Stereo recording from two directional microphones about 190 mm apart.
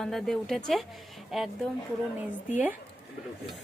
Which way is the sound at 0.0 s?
Centre (ahead or behind).